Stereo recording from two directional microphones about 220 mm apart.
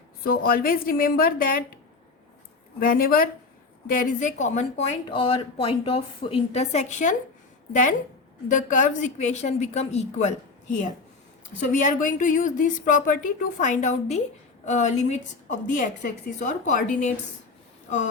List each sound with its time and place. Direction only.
0.3 s a woman's voice: 40° left (ahead or behind)
2.8 s a woman's voice: 40° left (ahead or behind)